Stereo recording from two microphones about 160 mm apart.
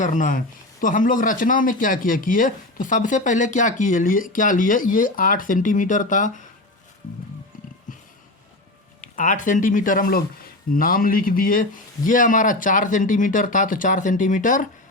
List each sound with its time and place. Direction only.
0.0 s speech: 55° left (ahead or behind)
9.0 s speech: 55° left (ahead or behind)